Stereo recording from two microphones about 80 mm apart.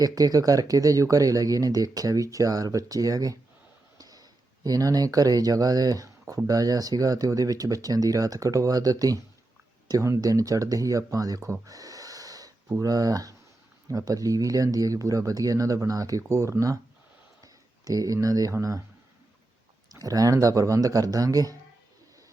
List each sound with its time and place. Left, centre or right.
0.0 s speech: right
11.6 s snort: right
12.8 s speech: right
17.4 s a sound: right
19.9 s speech: right